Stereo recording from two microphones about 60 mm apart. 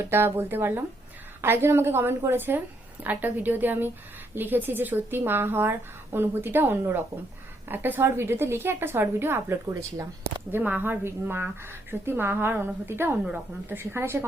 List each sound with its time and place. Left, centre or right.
0.0 s a woman's voice: right
10.5 s a woman's voice: right